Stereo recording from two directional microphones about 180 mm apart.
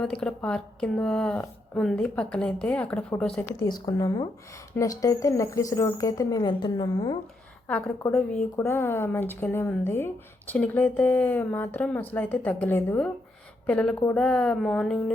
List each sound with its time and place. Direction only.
0.0 s speech: 5° left (ahead or behind)
3.6 s a woman's voice: 20° left (ahead or behind)
8.5 s speech: 15° left (ahead or behind)